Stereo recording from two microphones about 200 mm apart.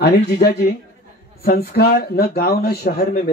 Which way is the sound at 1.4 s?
50° left (ahead or behind).